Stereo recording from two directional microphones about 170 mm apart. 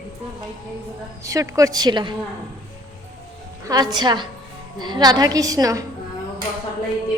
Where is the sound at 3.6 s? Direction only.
25° right (ahead or behind).